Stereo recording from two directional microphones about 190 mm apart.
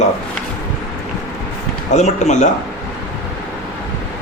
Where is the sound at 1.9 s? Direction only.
35° left (ahead or behind).